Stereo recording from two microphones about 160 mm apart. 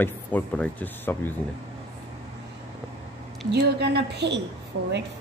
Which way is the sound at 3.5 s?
90° right.